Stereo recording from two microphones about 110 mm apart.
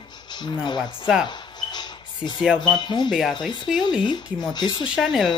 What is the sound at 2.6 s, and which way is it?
Speech, 40° left (ahead or behind).